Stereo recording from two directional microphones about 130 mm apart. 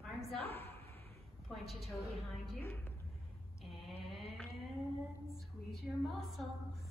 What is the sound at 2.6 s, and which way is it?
Speech, 15° left (ahead or behind).